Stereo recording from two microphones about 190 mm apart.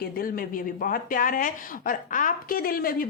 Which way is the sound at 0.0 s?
50° left (ahead or behind).